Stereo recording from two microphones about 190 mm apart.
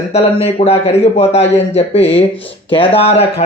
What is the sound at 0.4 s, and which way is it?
Speech, 30° left (ahead or behind).